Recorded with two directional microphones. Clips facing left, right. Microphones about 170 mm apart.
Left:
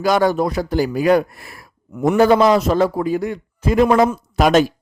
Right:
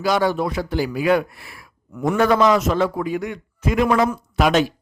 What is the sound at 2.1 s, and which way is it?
A man's voice, 30° left (ahead or behind).